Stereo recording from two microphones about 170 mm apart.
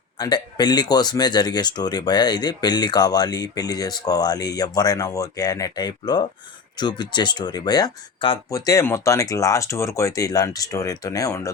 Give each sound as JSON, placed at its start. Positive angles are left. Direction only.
{"t": 0.2, "sound": "speech", "side_deg": 25}